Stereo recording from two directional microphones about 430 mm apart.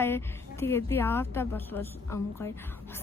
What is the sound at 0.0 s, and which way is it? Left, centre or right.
A woman's voice, centre.